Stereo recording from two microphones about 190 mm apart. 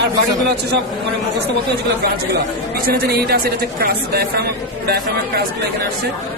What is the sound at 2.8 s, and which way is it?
A woman's voice, 55° right (ahead or behind).